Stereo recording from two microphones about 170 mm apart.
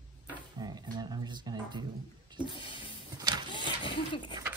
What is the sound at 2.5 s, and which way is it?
Music, 30° left (ahead or behind).